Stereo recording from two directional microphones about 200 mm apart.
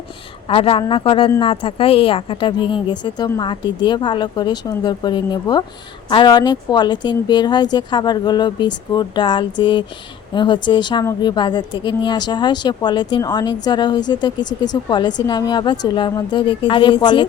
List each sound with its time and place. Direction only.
0.4 s a woman's voice: 30° left (ahead or behind)